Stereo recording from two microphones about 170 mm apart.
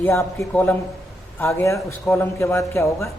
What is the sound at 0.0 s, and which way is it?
Speech, 15° left (ahead or behind).